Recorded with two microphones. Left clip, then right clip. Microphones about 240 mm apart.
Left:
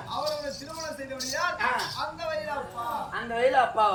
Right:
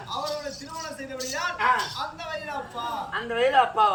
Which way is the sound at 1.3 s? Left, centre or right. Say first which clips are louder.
Right 3 dB; centre.